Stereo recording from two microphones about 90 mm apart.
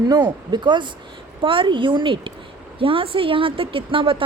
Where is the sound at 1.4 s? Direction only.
70° right (ahead or behind).